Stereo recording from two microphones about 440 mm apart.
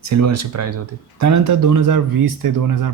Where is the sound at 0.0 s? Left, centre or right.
Right.